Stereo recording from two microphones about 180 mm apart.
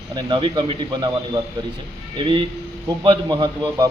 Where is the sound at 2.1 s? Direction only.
25° right (ahead or behind).